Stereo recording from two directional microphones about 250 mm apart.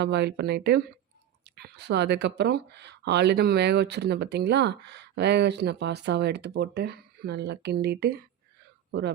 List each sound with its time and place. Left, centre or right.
0.0 s speech: right